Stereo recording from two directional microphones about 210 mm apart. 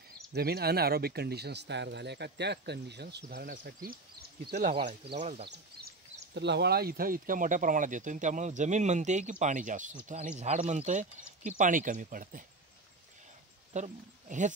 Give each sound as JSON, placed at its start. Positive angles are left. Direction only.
{"t": 0.3, "sound": "speech", "side_deg": -50}
{"t": 4.6, "sound": "speech", "side_deg": -35}
{"t": 5.5, "sound": "speech", "side_deg": -50}
{"t": 13.7, "sound": "speech", "side_deg": -35}